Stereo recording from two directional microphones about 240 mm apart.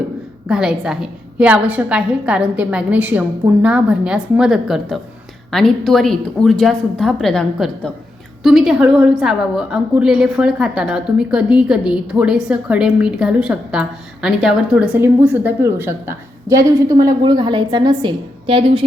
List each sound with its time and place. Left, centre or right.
0.4 s a woman's voice: centre; by 18.9 s right